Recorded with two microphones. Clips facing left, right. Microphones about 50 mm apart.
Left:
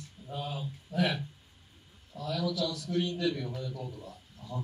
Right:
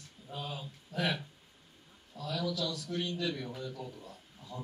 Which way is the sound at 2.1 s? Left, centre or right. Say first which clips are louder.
Left 3 dB; left.